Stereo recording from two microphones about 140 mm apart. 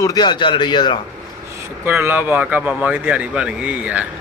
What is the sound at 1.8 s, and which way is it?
Speech, 15° right (ahead or behind).